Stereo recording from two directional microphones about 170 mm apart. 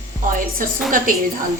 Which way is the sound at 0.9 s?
55° right (ahead or behind).